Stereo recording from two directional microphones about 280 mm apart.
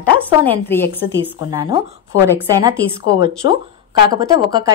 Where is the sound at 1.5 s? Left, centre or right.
Centre.